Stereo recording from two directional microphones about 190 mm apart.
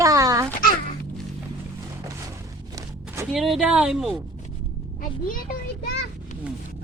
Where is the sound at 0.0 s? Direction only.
15° right (ahead or behind).